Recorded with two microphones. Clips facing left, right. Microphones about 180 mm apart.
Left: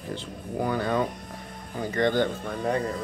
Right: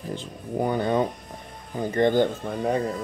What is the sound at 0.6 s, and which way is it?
Speech, 20° right (ahead or behind).